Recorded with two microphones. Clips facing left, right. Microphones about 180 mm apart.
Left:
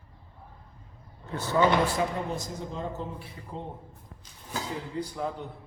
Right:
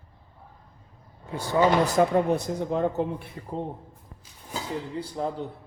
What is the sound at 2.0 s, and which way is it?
Speech, 60° right (ahead or behind).